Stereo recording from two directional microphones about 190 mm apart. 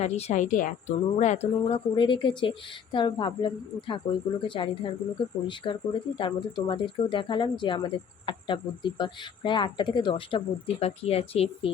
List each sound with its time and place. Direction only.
0.0 s speech: 35° left (ahead or behind)